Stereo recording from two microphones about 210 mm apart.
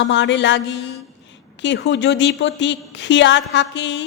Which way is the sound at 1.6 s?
55° left (ahead or behind).